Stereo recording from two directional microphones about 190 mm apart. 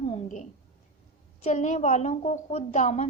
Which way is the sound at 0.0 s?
35° left (ahead or behind).